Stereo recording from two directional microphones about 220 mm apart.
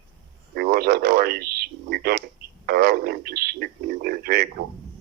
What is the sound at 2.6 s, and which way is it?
Speech, 45° right (ahead or behind).